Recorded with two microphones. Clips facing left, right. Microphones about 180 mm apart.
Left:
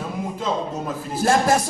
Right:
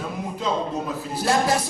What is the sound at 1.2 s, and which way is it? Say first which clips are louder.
Speech: left 3 dB; 50° left (ahead or behind).